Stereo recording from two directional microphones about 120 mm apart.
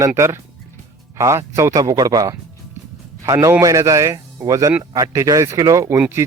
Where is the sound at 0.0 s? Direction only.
25° right (ahead or behind).